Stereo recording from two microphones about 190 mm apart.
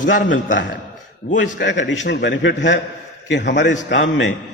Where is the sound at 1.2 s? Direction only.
65° left (ahead or behind).